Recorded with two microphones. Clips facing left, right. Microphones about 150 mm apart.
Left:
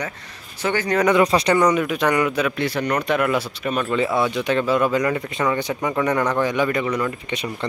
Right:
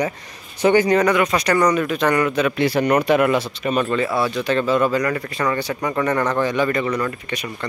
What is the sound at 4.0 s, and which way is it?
Speech, 20° left (ahead or behind).